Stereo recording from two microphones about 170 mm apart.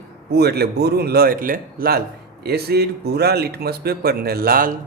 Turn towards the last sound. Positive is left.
turn(degrees=-60)  # may be behind; listen again after turning